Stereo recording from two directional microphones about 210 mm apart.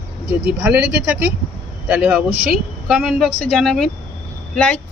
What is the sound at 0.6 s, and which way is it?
A woman's voice, 10° right (ahead or behind).